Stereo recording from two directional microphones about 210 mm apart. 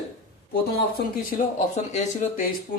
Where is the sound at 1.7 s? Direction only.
35° left (ahead or behind).